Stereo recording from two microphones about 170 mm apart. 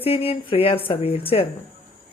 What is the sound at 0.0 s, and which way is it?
Speech, 35° left (ahead or behind).